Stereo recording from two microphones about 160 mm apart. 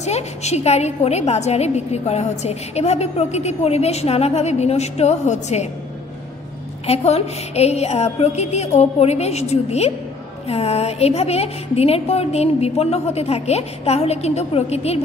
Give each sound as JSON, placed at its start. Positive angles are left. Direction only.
{"t": 0.0, "sound": "a woman's voice", "side_deg": 45}
{"t": 6.9, "sound": "a woman's voice", "side_deg": 40}